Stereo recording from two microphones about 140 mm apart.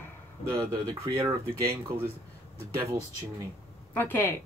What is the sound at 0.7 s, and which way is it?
Speech, 35° right (ahead or behind).